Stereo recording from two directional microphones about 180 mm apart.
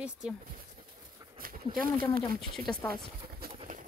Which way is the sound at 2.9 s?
55° right (ahead or behind).